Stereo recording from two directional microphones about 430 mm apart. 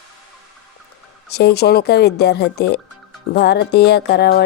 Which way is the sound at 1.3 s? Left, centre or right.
Left.